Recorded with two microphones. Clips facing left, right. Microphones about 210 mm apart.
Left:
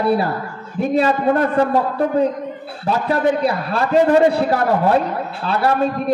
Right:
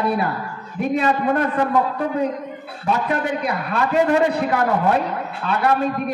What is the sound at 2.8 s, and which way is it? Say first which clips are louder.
A man's voice: left 4 dB; 35° left (ahead or behind).